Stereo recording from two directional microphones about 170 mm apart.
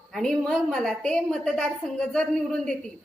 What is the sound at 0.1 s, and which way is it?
A woman's voice, 5° left (ahead or behind).